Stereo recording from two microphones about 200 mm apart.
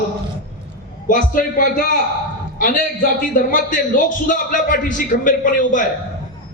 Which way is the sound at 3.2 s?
40° left (ahead or behind).